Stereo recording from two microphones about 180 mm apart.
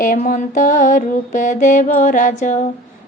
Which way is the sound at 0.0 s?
50° left (ahead or behind).